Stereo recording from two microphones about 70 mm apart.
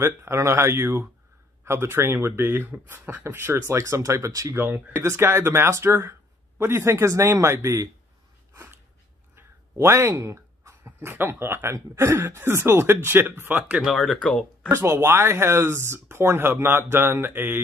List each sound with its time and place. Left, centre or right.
0.0 s speech: right
4.6 s speech: right
5.0 s speech: right
9.8 s speech: right
13.8 s speech: centre
14.7 s speech: right